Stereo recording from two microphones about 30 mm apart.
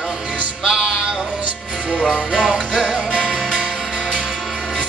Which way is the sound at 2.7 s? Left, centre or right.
Right.